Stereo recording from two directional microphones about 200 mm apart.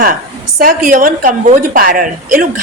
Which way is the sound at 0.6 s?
45° right (ahead or behind).